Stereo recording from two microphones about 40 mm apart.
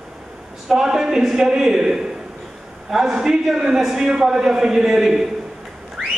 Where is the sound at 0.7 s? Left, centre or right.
Centre.